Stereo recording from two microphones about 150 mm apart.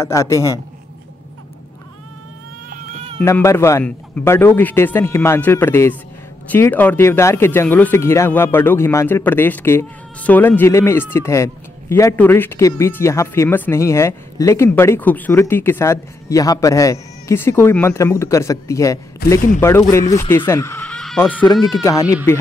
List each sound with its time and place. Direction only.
0.0 s a man's voice: 20° left (ahead or behind)
2.9 s cat: 45° right (ahead or behind)
3.2 s speech: 15° left (ahead or behind)
20.8 s fowl: 5° left (ahead or behind)
21.5 s a man's voice: 20° left (ahead or behind)